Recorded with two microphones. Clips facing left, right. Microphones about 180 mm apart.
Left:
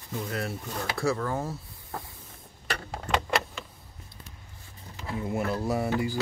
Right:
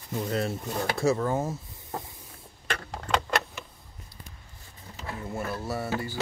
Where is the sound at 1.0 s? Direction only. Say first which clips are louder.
Right 3 dB; 20° right (ahead or behind).